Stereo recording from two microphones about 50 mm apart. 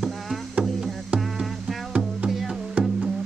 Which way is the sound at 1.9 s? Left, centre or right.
Right.